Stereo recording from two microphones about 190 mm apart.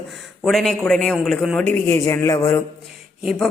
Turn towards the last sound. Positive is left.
turn(degrees=0)  # may be behind; listen again after turning